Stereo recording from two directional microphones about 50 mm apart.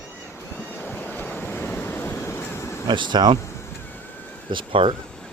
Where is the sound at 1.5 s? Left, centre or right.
Left.